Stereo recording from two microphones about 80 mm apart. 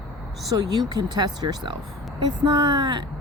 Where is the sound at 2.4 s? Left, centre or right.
Right.